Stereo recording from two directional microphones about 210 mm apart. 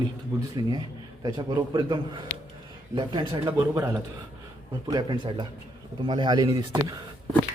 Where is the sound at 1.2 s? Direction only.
20° right (ahead or behind).